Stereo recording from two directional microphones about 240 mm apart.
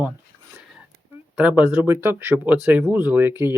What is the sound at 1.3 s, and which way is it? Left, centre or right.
Speech, centre.